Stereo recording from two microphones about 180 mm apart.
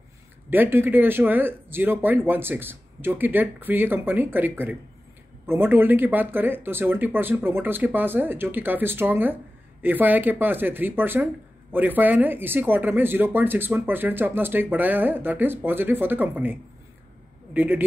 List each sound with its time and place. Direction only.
0.5 s speech: 10° right (ahead or behind)
17.6 s speech: 10° right (ahead or behind)